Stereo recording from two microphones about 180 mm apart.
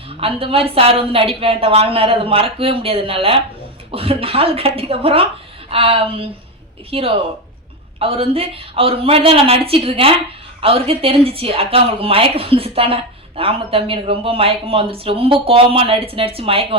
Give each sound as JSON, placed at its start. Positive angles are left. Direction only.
{"t": 0.2, "sound": "a woman's voice", "side_deg": -30}